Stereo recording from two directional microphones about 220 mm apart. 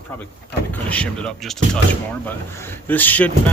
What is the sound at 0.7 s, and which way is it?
Speech, 5° left (ahead or behind).